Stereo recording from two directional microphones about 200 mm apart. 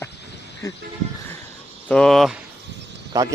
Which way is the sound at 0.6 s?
15° left (ahead or behind).